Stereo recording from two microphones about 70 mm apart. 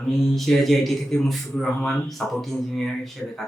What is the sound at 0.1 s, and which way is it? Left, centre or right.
A man's voice, centre.